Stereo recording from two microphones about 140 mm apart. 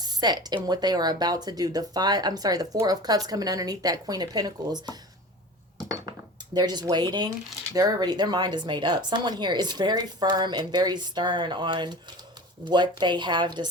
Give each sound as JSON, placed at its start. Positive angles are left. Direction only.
{"t": 0.0, "sound": "speech", "side_deg": -30}
{"t": 6.5, "sound": "speech", "side_deg": -30}